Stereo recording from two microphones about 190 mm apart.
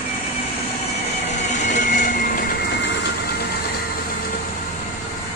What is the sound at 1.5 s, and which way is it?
Train, 40° left (ahead or behind).